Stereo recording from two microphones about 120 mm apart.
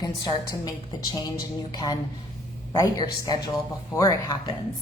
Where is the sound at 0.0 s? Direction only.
35° left (ahead or behind).